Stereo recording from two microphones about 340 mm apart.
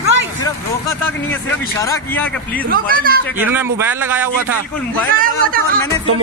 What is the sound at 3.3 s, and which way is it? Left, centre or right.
A man's voice, centre.